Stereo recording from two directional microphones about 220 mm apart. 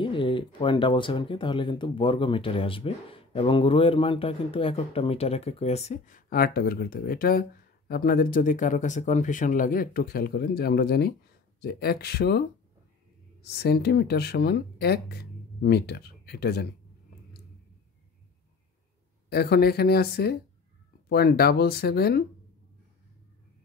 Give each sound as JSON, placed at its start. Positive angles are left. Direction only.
{"t": 0.0, "sound": "speech", "side_deg": 20}
{"t": 19.2, "sound": "speech", "side_deg": 45}